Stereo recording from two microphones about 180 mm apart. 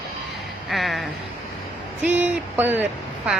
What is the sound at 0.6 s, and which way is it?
Speech, centre (ahead or behind).